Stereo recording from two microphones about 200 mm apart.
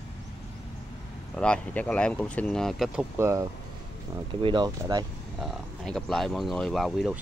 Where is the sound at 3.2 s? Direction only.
15° right (ahead or behind).